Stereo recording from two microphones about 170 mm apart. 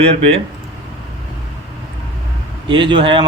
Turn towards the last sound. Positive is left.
turn(degrees=-30)  # may be behind; listen again after turning